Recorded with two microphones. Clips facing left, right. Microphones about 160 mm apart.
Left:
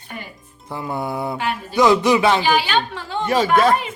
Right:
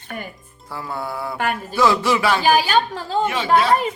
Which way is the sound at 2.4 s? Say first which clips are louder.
Right 2 dB; 40° right (ahead or behind).